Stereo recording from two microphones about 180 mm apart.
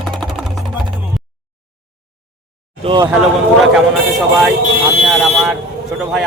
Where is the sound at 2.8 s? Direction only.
30° right (ahead or behind).